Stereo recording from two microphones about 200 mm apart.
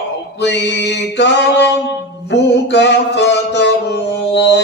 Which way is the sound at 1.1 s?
60° left (ahead or behind).